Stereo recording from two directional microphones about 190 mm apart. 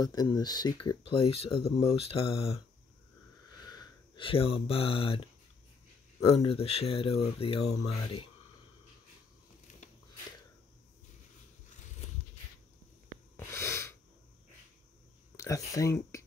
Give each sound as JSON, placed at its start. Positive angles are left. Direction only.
{"t": 0.0, "sound": "speech", "side_deg": 20}
{"t": 3.6, "sound": "speech", "side_deg": 20}
{"t": 6.3, "sound": "speech", "side_deg": 30}
{"t": 13.4, "sound": "sneeze", "side_deg": 15}
{"t": 15.3, "sound": "speech", "side_deg": 15}